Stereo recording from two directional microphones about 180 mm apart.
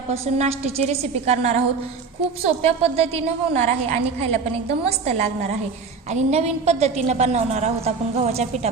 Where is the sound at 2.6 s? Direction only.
35° right (ahead or behind).